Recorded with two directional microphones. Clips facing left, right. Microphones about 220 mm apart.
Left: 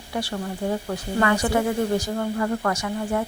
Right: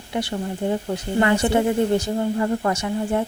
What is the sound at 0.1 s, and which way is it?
Speech, 20° right (ahead or behind).